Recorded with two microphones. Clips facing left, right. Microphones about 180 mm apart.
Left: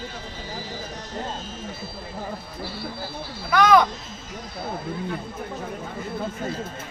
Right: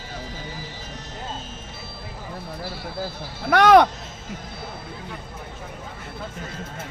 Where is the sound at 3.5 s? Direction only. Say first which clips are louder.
Right 3 dB; 65° right (ahead or behind).